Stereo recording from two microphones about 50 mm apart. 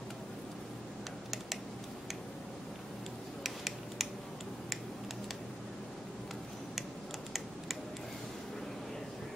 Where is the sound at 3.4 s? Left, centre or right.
Centre.